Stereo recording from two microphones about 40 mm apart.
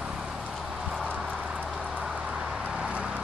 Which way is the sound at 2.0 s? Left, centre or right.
Centre.